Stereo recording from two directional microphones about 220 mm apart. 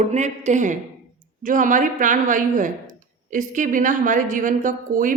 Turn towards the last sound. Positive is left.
turn(degrees=-40)  # may be behind; listen again after turning